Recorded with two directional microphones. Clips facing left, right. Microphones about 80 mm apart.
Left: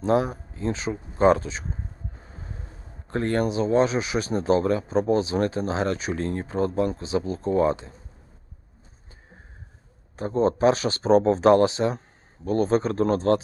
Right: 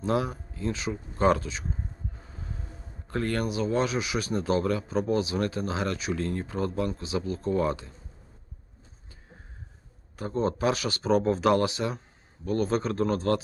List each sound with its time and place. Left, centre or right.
0.0 s speech: left
2.2 s music: left
3.1 s speech: left
10.2 s speech: left